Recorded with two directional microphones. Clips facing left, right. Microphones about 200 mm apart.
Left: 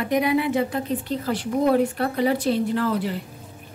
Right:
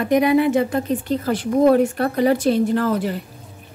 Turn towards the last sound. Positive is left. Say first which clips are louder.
# right 4 dB
turn(degrees=-45)  # may be behind; listen again after turning